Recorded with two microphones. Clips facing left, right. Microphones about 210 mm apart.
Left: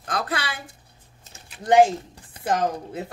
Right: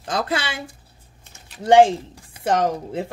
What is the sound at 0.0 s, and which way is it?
Speech, 25° right (ahead or behind).